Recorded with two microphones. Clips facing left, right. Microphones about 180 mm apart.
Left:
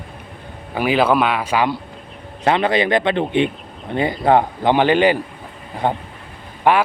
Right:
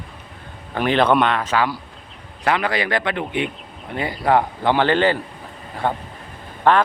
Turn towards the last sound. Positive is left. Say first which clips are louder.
# left 1 dB
turn(degrees=10)  # may be behind; listen again after turning